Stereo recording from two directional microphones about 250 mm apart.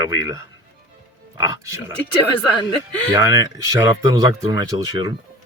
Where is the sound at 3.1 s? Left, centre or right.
Centre.